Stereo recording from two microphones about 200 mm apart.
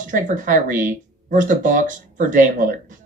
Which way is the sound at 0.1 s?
40° right (ahead or behind).